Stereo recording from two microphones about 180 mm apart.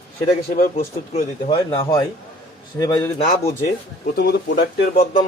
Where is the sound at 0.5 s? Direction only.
50° left (ahead or behind).